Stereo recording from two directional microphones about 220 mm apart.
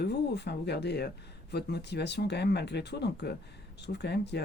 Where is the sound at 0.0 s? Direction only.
50° left (ahead or behind).